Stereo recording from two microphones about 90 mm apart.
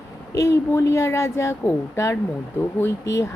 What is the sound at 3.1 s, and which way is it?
Speech, 35° left (ahead or behind).